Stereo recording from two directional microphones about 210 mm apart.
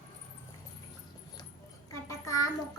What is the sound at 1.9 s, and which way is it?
Child singing, 15° left (ahead or behind).